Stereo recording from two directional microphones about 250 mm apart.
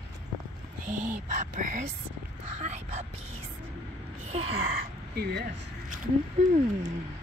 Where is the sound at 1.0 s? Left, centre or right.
Right.